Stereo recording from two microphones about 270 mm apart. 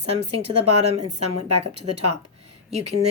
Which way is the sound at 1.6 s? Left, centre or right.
Right.